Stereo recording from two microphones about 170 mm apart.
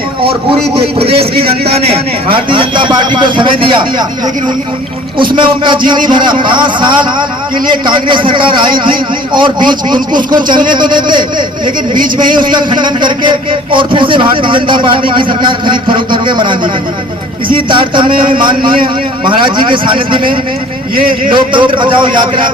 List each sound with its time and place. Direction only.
0.2 s a man's voice: 35° right (ahead or behind)
5.1 s a man's voice: 30° right (ahead or behind)
17.7 s a man's voice: 30° right (ahead or behind)